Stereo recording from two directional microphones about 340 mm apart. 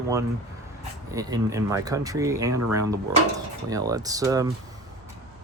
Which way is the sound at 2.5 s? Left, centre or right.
Right.